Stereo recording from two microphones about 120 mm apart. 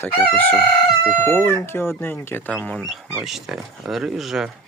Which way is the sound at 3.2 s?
Centre (ahead or behind).